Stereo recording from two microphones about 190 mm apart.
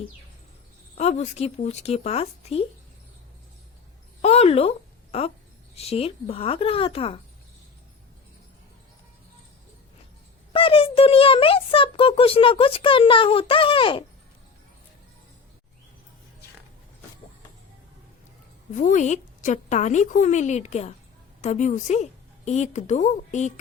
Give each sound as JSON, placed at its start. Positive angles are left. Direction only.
{"t": 0.9, "sound": "a woman's voice", "side_deg": 35}
{"t": 4.2, "sound": "speech", "side_deg": 35}
{"t": 5.7, "sound": "a woman's voice", "side_deg": 30}
{"t": 10.5, "sound": "a child's voice", "side_deg": 30}
{"t": 18.7, "sound": "a woman's voice", "side_deg": 40}